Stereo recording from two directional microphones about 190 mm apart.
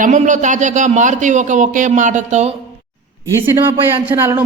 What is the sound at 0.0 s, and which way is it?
A woman's voice, 40° right (ahead or behind).